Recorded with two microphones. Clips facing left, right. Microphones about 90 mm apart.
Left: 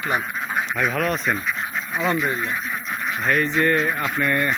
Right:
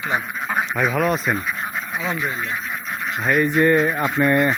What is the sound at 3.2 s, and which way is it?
Speech, 10° right (ahead or behind).